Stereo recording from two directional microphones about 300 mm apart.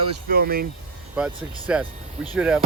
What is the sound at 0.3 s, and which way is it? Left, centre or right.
Speech, right.